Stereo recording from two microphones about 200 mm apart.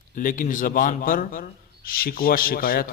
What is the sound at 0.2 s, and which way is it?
A man's voice, 40° left (ahead or behind).